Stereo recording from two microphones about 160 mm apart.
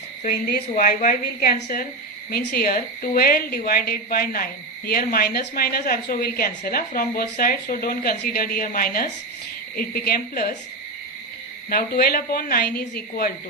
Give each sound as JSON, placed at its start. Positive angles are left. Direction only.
{"t": 0.2, "sound": "a woman's voice", "side_deg": 65}
{"t": 11.7, "sound": "speech", "side_deg": 70}